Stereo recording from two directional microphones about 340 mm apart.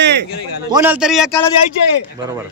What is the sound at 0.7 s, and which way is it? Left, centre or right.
Speech, centre.